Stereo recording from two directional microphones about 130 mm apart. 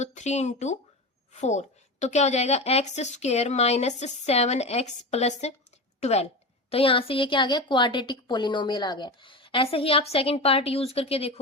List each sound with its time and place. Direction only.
0.0 s a woman's voice: 65° left (ahead or behind)
6.7 s a woman's voice: 45° left (ahead or behind)